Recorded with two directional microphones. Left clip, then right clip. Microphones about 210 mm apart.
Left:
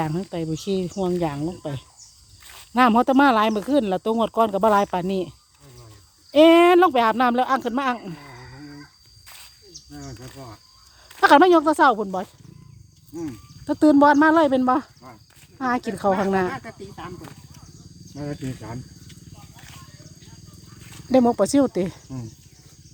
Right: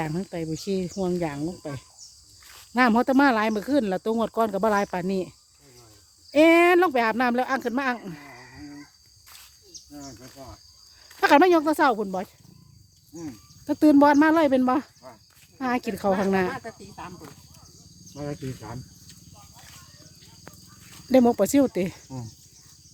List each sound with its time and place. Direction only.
0.0 s speech: 5° right (ahead or behind)
2.4 s a sound: 50° left (ahead or behind)
2.7 s speech: 5° right (ahead or behind)
6.3 s speech: 5° right (ahead or behind)
11.2 s speech: 5° right (ahead or behind)
13.7 s speech: 10° right (ahead or behind)
21.1 s speech: 15° right (ahead or behind)